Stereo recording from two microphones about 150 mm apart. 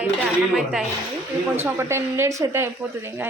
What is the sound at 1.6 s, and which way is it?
Speech, 15° right (ahead or behind).